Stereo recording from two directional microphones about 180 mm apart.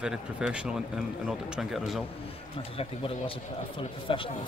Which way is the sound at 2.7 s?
30° left (ahead or behind).